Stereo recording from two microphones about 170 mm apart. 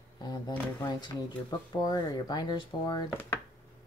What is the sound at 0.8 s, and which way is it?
Speech, 25° left (ahead or behind).